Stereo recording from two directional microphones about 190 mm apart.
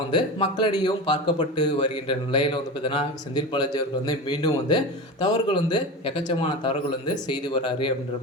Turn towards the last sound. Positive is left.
turn(degrees=25)  # may be behind; listen again after turning